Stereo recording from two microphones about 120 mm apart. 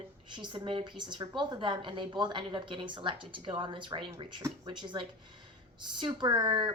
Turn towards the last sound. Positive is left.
turn(degrees=-40)  # may be behind; listen again after turning